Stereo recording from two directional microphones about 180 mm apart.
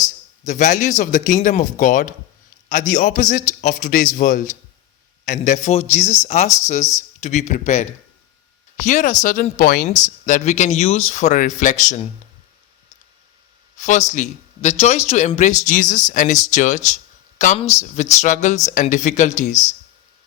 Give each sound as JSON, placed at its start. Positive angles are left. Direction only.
{"t": 0.4, "sound": "speech", "side_deg": 45}
{"t": 13.7, "sound": "speech", "side_deg": 45}